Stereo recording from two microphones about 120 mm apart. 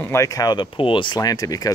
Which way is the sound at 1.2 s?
30° left (ahead or behind).